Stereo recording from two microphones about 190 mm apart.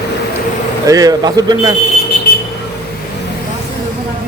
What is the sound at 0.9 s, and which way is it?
Speech, 20° right (ahead or behind).